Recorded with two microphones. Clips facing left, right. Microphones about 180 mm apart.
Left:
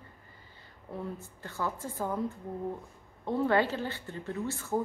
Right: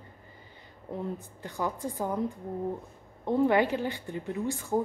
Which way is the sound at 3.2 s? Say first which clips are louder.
Right 3 dB; 15° right (ahead or behind).